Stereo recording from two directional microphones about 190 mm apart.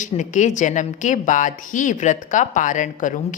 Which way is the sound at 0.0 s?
40° left (ahead or behind).